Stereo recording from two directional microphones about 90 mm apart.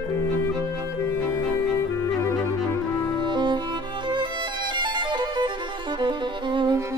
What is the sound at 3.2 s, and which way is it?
Music, 55° right (ahead or behind).